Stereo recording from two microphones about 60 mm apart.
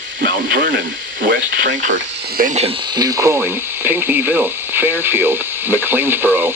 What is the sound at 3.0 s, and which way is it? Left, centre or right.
Speech, right.